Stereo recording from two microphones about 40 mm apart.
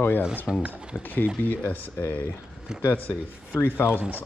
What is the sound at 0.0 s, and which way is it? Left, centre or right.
Speech, left.